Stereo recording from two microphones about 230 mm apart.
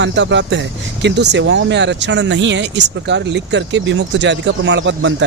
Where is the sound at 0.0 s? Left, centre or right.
Right.